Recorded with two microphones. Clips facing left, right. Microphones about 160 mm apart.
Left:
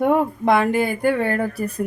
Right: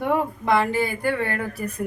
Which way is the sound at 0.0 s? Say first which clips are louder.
Left 5 dB; 50° left (ahead or behind).